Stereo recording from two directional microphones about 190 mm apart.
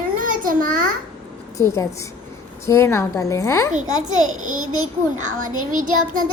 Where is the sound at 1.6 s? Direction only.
15° left (ahead or behind).